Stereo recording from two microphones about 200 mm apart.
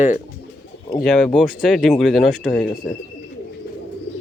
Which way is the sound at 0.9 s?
5° left (ahead or behind).